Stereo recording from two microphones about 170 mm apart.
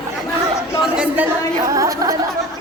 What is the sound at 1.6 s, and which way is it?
Speech, 20° right (ahead or behind).